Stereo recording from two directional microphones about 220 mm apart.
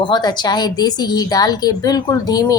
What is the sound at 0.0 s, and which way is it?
A woman's voice, 20° left (ahead or behind).